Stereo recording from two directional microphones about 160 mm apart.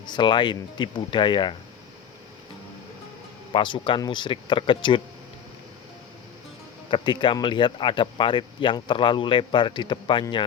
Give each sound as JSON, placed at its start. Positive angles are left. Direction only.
{"t": 0.0, "sound": "speech", "side_deg": 30}
{"t": 3.5, "sound": "speech", "side_deg": 30}
{"t": 6.9, "sound": "speech", "side_deg": 30}